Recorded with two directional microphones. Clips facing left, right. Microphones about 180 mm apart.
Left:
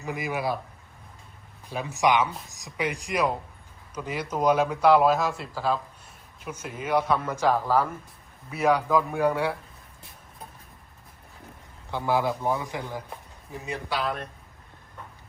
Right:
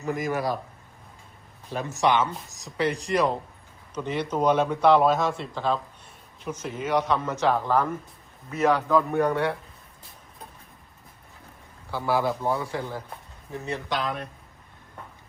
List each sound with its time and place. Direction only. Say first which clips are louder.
0.3 s a man's voice: left 1 dB; 10° left (ahead or behind)
1.7 s a man's voice: even; 10° left (ahead or behind)
11.9 s a man's voice: even; 20° left (ahead or behind)